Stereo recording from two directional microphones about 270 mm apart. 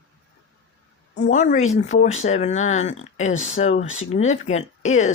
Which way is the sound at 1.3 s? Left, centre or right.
Left.